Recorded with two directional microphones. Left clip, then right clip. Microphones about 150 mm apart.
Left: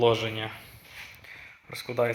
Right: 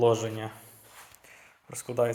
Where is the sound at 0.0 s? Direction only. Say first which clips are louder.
Left 1 dB; 15° right (ahead or behind).